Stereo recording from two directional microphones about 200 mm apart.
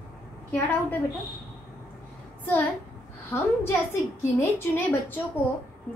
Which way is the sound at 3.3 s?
10° left (ahead or behind).